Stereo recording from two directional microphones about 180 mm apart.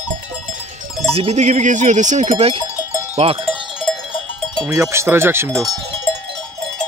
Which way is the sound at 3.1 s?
30° right (ahead or behind).